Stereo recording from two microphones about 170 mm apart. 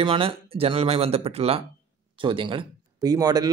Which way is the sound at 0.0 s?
30° right (ahead or behind).